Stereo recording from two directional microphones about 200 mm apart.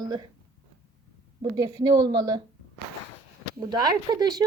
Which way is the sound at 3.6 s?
20° right (ahead or behind).